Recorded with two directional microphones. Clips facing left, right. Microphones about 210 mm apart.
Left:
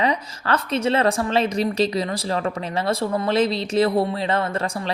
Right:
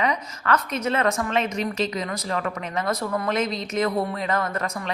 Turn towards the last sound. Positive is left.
turn(degrees=30)  # may be behind; listen again after turning